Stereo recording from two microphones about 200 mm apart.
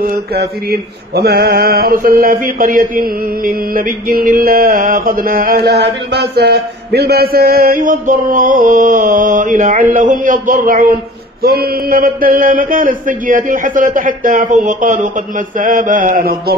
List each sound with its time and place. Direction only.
0.0 s mantra: 45° right (ahead or behind)